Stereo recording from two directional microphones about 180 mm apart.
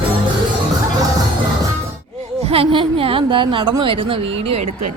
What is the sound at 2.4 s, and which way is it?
A woman's voice, 35° right (ahead or behind).